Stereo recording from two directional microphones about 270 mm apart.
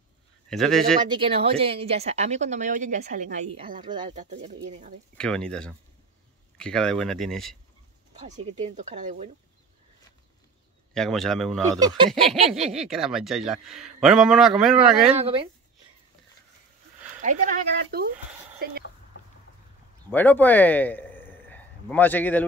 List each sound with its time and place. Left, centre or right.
0.5 s speech: centre
1.0 s speech: centre
3.8 s speech: centre
5.1 s speech: centre
8.1 s a sound: right
8.7 s speech: right
10.9 s speech: centre
11.8 s speech: centre
12.4 s speech: centre
15.1 s speech: right
17.2 s speech: right
20.1 s a man's voice: centre